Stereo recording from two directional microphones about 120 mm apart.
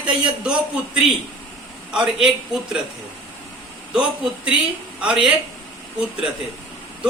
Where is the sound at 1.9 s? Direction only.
5° right (ahead or behind).